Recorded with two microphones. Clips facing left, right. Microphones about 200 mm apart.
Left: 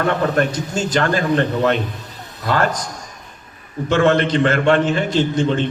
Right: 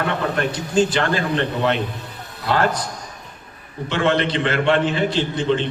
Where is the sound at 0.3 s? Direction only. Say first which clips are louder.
Right 1 dB; 45° left (ahead or behind).